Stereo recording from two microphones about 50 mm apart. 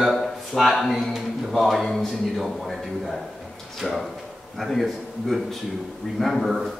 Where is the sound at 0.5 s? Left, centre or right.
Centre.